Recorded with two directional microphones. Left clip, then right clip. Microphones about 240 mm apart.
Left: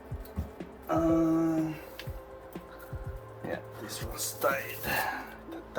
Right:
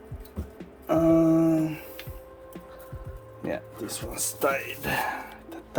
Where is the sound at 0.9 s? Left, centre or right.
Right.